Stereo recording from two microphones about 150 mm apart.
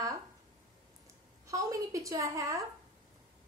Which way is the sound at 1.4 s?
20° right (ahead or behind).